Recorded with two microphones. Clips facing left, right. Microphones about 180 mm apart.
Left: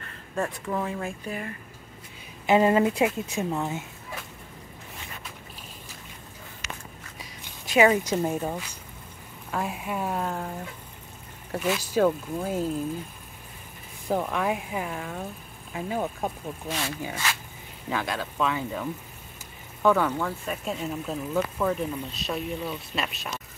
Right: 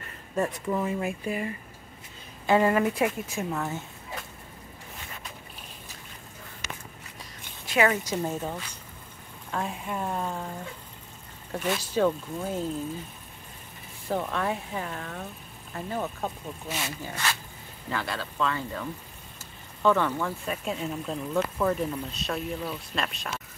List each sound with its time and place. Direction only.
0.4 s speech: 5° right (ahead or behind)
2.4 s a woman's voice: 20° left (ahead or behind)
7.2 s a sound: 15° left (ahead or behind)
8.1 s speech: 10° left (ahead or behind)
11.5 s speech: 5° left (ahead or behind)
14.0 s speech: 10° left (ahead or behind)
16.6 s speech: 5° right (ahead or behind)
17.0 s speech: 10° left (ahead or behind)